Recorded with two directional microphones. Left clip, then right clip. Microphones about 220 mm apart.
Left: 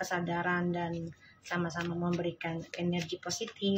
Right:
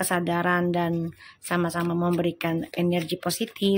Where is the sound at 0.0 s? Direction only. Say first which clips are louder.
Right 8 dB; 50° right (ahead or behind).